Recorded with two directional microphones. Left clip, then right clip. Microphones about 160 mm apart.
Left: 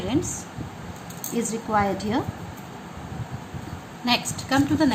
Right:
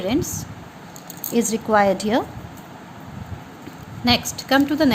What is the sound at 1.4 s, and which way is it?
Speech, 80° right.